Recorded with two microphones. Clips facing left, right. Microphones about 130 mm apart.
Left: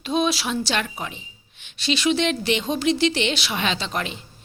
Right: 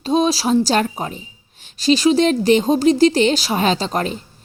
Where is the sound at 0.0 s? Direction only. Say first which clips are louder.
Right 6 dB; 35° right (ahead or behind).